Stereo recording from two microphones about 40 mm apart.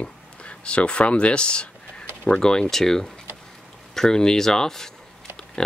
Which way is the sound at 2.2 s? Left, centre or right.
Centre.